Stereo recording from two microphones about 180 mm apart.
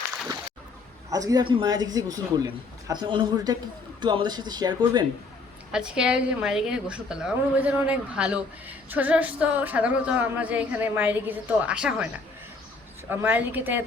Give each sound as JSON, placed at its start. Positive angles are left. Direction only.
{"t": 1.1, "sound": "a man's voice", "side_deg": -20}
{"t": 5.7, "sound": "a woman's voice", "side_deg": -5}
{"t": 13.1, "sound": "a woman's voice", "side_deg": -10}